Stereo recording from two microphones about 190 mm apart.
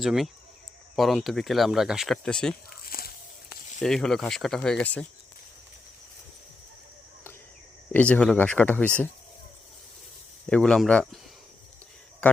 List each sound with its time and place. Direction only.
0.0 s speech: centre (ahead or behind)
2.6 s a sound: 50° left (ahead or behind)
3.8 s speech: centre (ahead or behind)
7.9 s speech: 5° left (ahead or behind)
10.5 s speech: 5° left (ahead or behind)
12.2 s speech: 5° left (ahead or behind)